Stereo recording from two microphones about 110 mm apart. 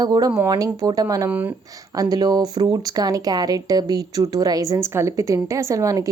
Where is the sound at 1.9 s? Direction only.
35° right (ahead or behind).